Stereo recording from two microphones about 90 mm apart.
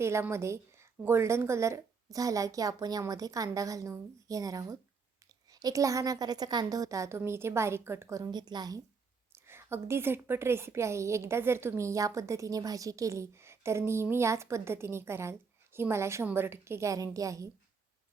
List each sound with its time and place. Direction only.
0.0 s a woman's voice: 30° right (ahead or behind)
8.2 s a woman's voice: 50° right (ahead or behind)
9.3 s a woman's voice: 30° right (ahead or behind)